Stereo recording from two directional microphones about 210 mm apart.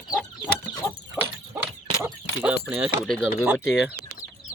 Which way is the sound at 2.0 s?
10° right (ahead or behind).